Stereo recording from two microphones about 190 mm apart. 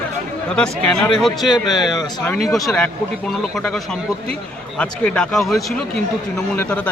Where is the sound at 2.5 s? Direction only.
Centre (ahead or behind).